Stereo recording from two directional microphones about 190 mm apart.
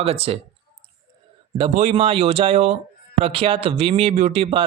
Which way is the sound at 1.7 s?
40° right (ahead or behind).